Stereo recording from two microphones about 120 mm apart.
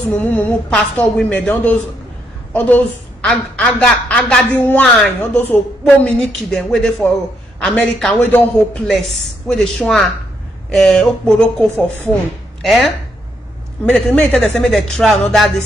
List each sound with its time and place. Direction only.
0.1 s a woman's voice: 15° left (ahead or behind)
0.7 s a woman's voice: 5° left (ahead or behind)
6.0 s speech: 5° left (ahead or behind)
8.2 s a woman's voice: 15° left (ahead or behind)
9.5 s speech: 5° left (ahead or behind)
12.1 s a woman's voice: 15° right (ahead or behind)
12.6 s speech: centre (ahead or behind)
13.8 s speech: 10° left (ahead or behind)